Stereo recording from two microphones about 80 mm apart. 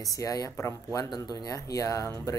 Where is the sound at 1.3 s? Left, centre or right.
Left.